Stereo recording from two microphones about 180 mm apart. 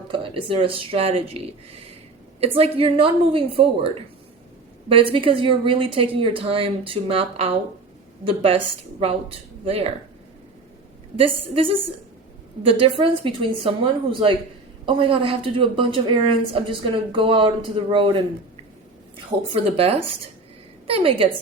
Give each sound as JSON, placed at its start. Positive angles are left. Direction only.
{"t": 0.1, "sound": "a woman's voice", "side_deg": -30}
{"t": 2.4, "sound": "a woman's voice", "side_deg": -35}
{"t": 11.2, "sound": "speech", "side_deg": -30}
{"t": 13.0, "sound": "a woman's voice", "side_deg": -30}